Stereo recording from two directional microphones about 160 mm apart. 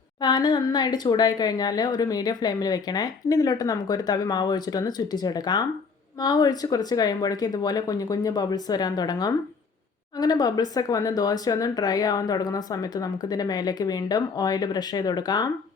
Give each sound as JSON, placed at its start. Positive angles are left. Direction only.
{"t": 0.2, "sound": "a woman's voice", "side_deg": 25}